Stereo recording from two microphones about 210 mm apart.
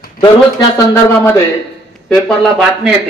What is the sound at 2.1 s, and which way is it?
Speech, centre (ahead or behind).